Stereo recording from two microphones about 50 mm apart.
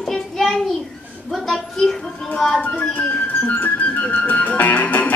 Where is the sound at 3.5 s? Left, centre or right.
Left.